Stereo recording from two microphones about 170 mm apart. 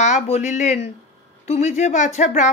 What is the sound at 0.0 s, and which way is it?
Speech, 45° left (ahead or behind).